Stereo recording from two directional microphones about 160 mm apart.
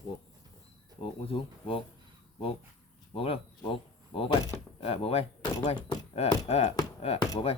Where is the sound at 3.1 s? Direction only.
35° left (ahead or behind).